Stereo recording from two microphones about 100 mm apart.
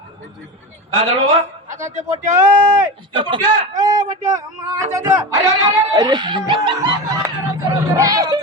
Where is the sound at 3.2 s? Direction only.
55° right (ahead or behind).